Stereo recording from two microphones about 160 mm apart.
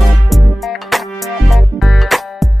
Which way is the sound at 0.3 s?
Centre (ahead or behind).